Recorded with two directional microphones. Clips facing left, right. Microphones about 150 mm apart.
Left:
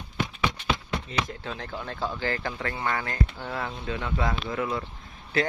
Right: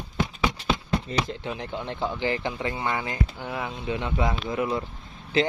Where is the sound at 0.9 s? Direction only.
30° right (ahead or behind).